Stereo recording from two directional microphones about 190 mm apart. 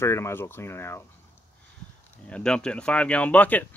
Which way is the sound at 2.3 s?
5° left (ahead or behind).